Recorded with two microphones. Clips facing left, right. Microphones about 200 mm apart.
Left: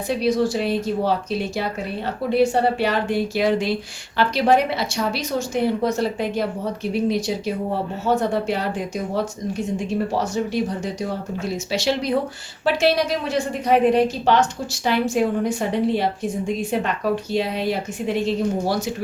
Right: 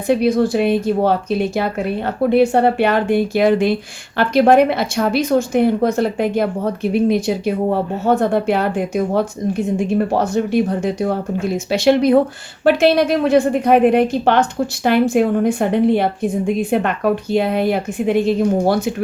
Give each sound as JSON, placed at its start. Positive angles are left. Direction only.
{"t": 0.1, "sound": "a woman's voice", "side_deg": -55}